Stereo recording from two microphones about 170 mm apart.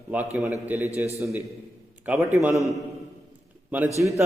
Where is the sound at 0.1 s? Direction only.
10° right (ahead or behind).